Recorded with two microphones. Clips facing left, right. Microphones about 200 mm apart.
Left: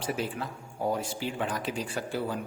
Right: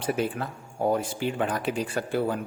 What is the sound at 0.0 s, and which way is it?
Speech, 55° right (ahead or behind).